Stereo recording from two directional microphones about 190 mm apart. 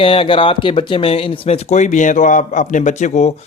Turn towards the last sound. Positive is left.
turn(degrees=35)  # may be behind; listen again after turning